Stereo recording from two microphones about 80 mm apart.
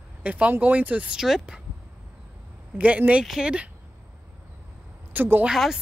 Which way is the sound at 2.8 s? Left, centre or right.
Centre.